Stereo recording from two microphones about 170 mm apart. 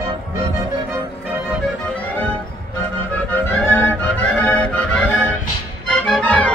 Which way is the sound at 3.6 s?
10° left (ahead or behind).